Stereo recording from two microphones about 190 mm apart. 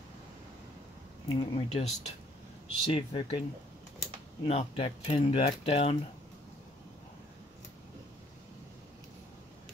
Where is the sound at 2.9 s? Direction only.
30° left (ahead or behind).